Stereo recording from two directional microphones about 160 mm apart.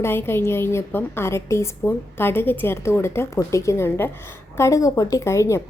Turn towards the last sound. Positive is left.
turn(degrees=20)  # may be behind; listen again after turning